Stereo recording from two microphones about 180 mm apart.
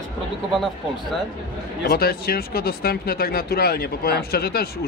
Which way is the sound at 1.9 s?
60° left (ahead or behind).